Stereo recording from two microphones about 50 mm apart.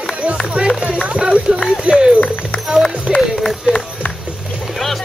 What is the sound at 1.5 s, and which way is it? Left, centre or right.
Run, centre.